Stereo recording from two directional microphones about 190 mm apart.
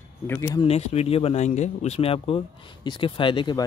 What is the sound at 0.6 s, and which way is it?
Speech, 35° left (ahead or behind).